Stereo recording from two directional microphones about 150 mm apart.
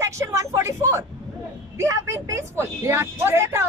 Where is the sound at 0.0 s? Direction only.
20° right (ahead or behind).